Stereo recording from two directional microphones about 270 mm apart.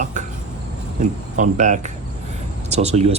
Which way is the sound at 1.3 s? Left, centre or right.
Right.